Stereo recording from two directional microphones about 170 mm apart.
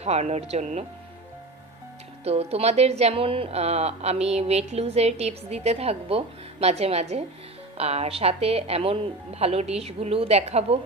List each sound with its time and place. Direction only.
0.0 s a woman's voice: 40° right (ahead or behind)
2.2 s a woman's voice: 40° right (ahead or behind)